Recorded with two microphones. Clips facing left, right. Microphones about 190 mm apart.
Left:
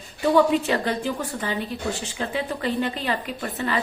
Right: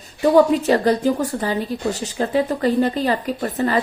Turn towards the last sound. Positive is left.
turn(degrees=-40)  # may be behind; listen again after turning